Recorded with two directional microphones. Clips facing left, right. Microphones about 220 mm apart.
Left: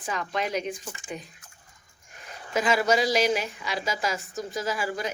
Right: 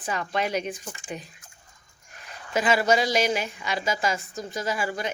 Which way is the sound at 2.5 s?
Centre (ahead or behind).